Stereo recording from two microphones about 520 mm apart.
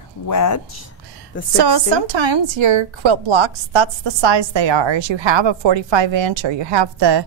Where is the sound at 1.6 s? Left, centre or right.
Right.